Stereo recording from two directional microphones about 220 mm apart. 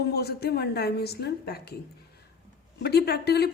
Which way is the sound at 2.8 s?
45° left (ahead or behind).